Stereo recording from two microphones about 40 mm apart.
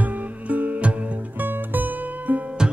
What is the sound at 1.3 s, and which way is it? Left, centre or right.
Music, right.